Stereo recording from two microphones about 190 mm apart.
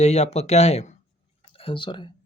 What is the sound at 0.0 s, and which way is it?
Speech, 35° left (ahead or behind).